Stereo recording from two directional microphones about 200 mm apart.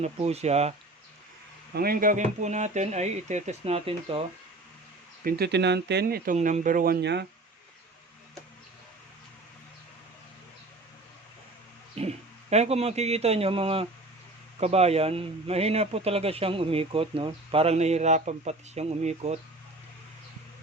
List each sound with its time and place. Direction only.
0.0 s a man's voice: 30° right (ahead or behind)
1.7 s a man's voice: 50° right (ahead or behind); by 4.2 s 30° right (ahead or behind)
5.2 s speech: 55° right (ahead or behind)
6.3 s speech: 35° right (ahead or behind); by 7.3 s 55° right (ahead or behind)
11.9 s a man's voice: 30° right (ahead or behind)